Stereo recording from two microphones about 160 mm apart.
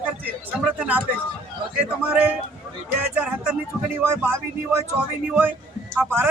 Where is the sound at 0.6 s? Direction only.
10° right (ahead or behind).